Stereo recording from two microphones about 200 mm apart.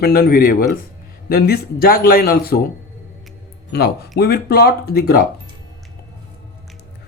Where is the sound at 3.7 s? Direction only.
55° left (ahead or behind).